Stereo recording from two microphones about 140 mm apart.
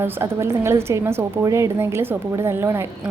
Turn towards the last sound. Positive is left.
turn(degrees=-15)  # may be behind; listen again after turning